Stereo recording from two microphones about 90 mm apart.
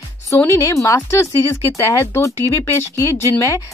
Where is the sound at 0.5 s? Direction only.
35° left (ahead or behind).